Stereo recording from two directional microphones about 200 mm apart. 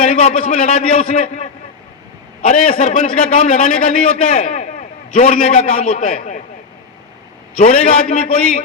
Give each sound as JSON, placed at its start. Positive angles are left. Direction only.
{"t": 0.1, "sound": "a man's voice", "side_deg": 35}
{"t": 2.5, "sound": "a man's voice", "side_deg": 35}
{"t": 7.6, "sound": "a man's voice", "side_deg": 35}